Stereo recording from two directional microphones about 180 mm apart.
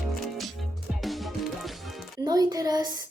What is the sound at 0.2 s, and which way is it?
Music, centre (ahead or behind).